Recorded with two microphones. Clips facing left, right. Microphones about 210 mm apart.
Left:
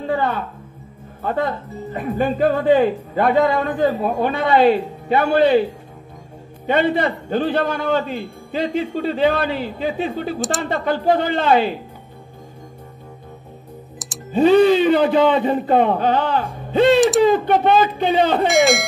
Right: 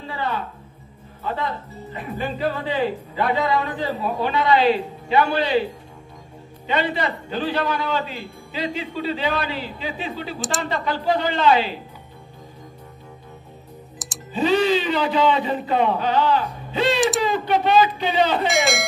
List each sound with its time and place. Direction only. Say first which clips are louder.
0.0 s a woman's voice: left 6 dB; 50° left (ahead or behind)
6.6 s a man's voice: left 6 dB; 55° left (ahead or behind)
14.0 s music: left 2 dB; centre (ahead or behind)
14.3 s a man's voice: left 7 dB; 55° left (ahead or behind)
18.5 s speech: left 6 dB; centre (ahead or behind)